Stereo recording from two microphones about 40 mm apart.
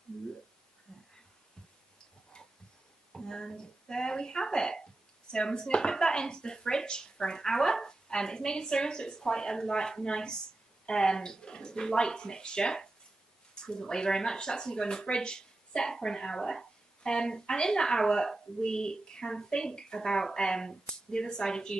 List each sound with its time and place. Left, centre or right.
0.9 s a sound: centre
2.3 s tick-tock: left
3.1 s speech: centre